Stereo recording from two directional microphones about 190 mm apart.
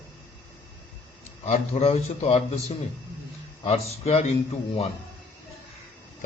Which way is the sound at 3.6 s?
35° left (ahead or behind).